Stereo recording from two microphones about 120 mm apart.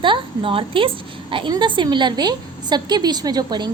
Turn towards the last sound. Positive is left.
turn(degrees=-35)  # may be behind; listen again after turning